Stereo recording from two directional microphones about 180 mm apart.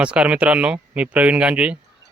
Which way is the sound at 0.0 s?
5° right (ahead or behind).